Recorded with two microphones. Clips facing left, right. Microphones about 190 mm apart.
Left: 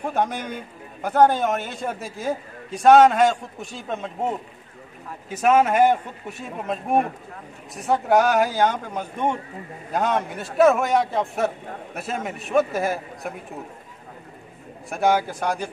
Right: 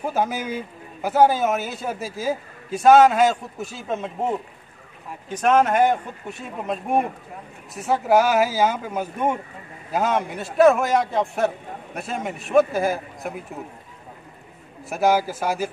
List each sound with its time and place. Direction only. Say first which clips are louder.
0.0 s a man's voice: right 1 dB; 5° right (ahead or behind)
14.9 s a man's voice: right 1 dB; 5° right (ahead or behind)